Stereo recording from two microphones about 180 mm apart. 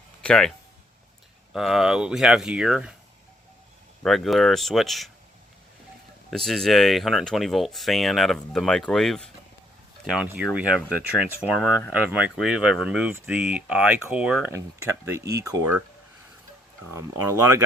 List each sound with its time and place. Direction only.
0.2 s speech: 5° left (ahead or behind)
1.5 s speech: centre (ahead or behind)
4.0 s speech: centre (ahead or behind)
6.3 s speech: centre (ahead or behind); by 15.7 s 15° right (ahead or behind)